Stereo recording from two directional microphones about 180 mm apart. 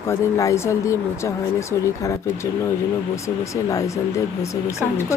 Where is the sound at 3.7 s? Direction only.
15° left (ahead or behind).